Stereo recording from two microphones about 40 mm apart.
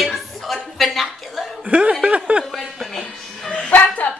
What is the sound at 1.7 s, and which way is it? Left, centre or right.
Chuckle, right.